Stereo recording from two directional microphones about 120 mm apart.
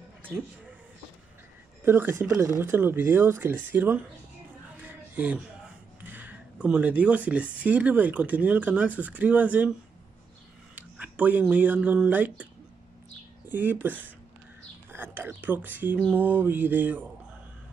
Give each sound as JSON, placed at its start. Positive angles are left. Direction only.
{"t": 1.9, "sound": "speech", "side_deg": -15}
{"t": 4.8, "sound": "a sound", "side_deg": -15}
{"t": 6.0, "sound": "speech", "side_deg": -15}
{"t": 13.5, "sound": "speech", "side_deg": -15}